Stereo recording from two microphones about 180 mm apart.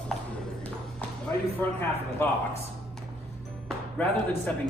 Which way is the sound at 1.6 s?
10° left (ahead or behind).